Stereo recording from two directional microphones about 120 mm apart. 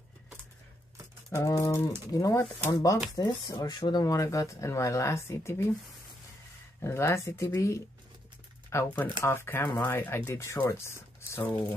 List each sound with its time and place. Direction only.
1.3 s speech: 25° left (ahead or behind)
6.8 s speech: 20° left (ahead or behind)